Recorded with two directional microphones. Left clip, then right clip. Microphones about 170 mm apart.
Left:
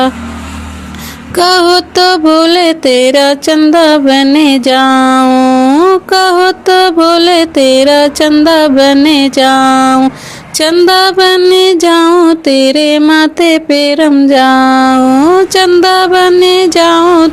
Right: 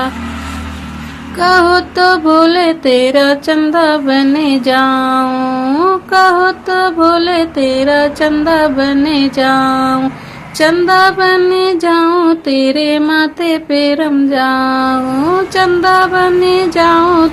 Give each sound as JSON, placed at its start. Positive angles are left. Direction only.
{"t": 1.4, "sound": "music", "side_deg": 50}